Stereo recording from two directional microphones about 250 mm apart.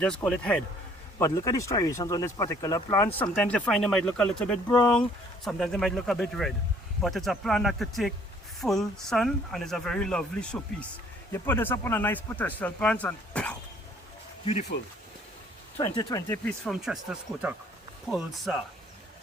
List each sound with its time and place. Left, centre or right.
0.0 s speech: centre
14.4 s speech: left
15.8 s speech: centre
16.5 s speech: centre